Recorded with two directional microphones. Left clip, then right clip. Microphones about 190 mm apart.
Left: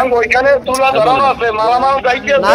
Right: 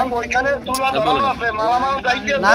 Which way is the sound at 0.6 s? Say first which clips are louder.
Left 7 dB; 10° left (ahead or behind).